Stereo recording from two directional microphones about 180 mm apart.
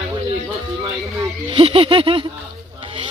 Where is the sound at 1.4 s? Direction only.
30° right (ahead or behind).